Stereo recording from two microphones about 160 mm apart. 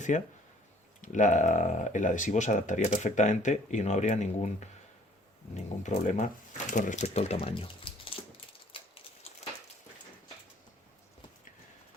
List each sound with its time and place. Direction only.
0.1 s speech: 50° left (ahead or behind); by 8.2 s 35° left (ahead or behind)
8.7 s typewriter: 35° left (ahead or behind)
9.4 s a sound: 45° left (ahead or behind)